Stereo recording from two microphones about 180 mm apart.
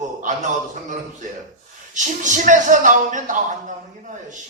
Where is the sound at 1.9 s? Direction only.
45° right (ahead or behind).